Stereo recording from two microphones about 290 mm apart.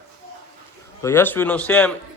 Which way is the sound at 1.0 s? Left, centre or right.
Centre.